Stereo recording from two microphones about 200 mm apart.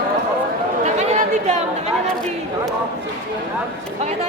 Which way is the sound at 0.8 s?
35° right (ahead or behind).